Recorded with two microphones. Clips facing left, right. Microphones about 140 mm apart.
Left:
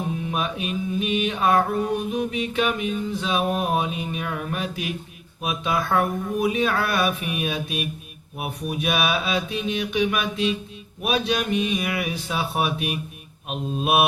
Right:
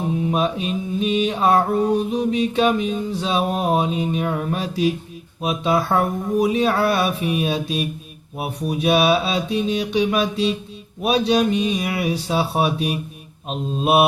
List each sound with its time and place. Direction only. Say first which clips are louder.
0.3 s mantra: right 6 dB; 30° right (ahead or behind)
5.4 s speech: right 5 dB; 30° right (ahead or behind)
8.4 s mantra: right 4 dB; 30° right (ahead or behind)
13.5 s speech: right 4 dB; 30° right (ahead or behind)